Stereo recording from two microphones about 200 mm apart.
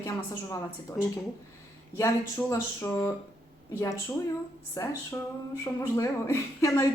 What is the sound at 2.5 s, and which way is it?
Speech, 10° left (ahead or behind).